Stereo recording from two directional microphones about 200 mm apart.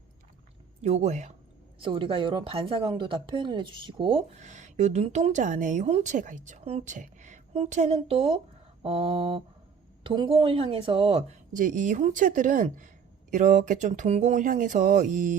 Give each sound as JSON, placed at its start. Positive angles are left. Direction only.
{"t": 0.8, "sound": "a woman's voice", "side_deg": -35}
{"t": 11.5, "sound": "speech", "side_deg": -40}